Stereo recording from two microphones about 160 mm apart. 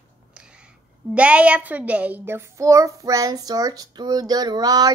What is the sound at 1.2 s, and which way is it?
A child's voice, 10° right (ahead or behind).